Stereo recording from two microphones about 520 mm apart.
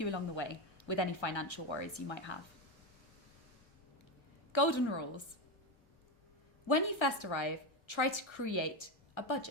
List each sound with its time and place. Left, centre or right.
0.0 s a woman's voice: left
4.5 s a woman's voice: left
6.7 s a woman's voice: left